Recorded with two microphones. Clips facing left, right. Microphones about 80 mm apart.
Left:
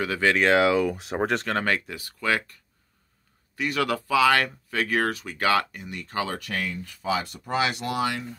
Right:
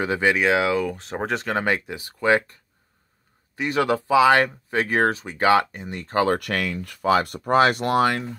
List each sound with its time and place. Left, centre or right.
0.0 s speech: centre
0.5 s speech: centre
1.6 s speech: centre; by 6.4 s right
6.4 s speech: right